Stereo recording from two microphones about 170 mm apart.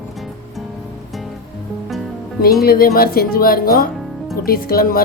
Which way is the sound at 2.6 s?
60° left (ahead or behind).